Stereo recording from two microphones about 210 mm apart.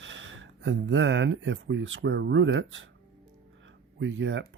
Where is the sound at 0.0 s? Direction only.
60° right (ahead or behind).